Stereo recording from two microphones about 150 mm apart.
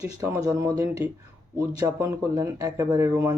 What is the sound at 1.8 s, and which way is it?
Speech, 20° right (ahead or behind).